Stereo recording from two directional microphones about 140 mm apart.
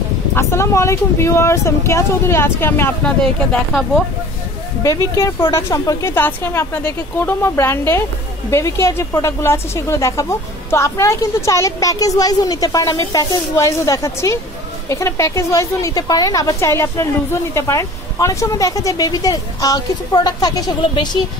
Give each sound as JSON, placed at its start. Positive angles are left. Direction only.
{"t": 0.3, "sound": "a woman's voice", "side_deg": 20}
{"t": 4.8, "sound": "a woman's voice", "side_deg": 25}